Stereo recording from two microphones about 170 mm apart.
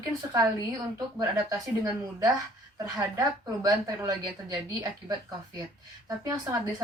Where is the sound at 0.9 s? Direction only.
20° right (ahead or behind).